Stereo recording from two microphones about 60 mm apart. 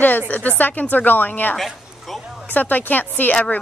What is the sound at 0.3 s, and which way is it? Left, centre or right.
A woman's voice, left.